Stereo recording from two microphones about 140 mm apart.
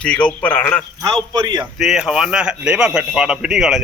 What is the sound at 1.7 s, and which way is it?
Speech, 5° right (ahead or behind).